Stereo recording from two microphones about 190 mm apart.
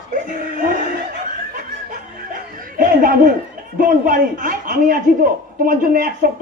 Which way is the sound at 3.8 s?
45° right (ahead or behind).